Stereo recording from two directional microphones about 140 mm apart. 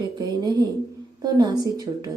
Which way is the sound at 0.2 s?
30° right (ahead or behind).